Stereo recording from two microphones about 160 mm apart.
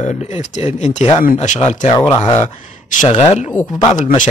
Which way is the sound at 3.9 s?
50° left (ahead or behind).